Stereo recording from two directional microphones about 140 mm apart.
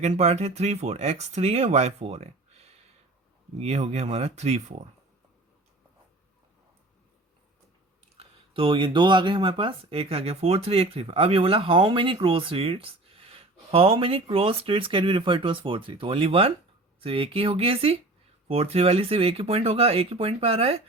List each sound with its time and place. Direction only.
0.0 s speech: 50° right (ahead or behind)
8.2 s speech: 40° right (ahead or behind)